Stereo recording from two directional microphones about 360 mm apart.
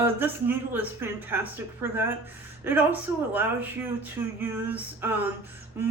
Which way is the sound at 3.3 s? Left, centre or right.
Centre.